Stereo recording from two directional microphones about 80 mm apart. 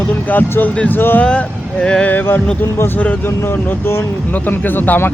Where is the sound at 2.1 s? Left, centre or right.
Left.